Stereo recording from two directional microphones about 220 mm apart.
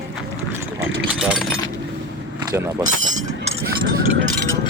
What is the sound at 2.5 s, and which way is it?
Speech, 10° right (ahead or behind).